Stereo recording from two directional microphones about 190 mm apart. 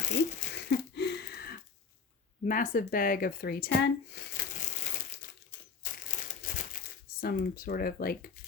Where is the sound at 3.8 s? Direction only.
60° left (ahead or behind).